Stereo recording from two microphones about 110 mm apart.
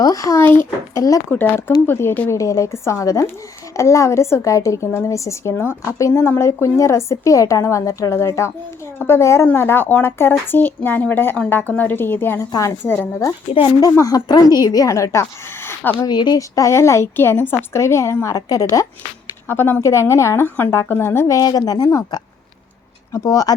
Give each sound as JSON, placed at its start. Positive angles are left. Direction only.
{"t": 0.0, "sound": "a woman's voice", "side_deg": 30}
{"t": 1.3, "sound": "a woman's voice", "side_deg": 20}
{"t": 2.3, "sound": "a woman's voice", "side_deg": 30}
{"t": 12.4, "sound": "a woman's voice", "side_deg": 30}
{"t": 12.8, "sound": "speech", "side_deg": 20}
{"t": 14.0, "sound": "a woman's voice", "side_deg": 35}
{"t": 16.0, "sound": "a woman's voice", "side_deg": 40}
{"t": 19.5, "sound": "a woman's voice", "side_deg": 20}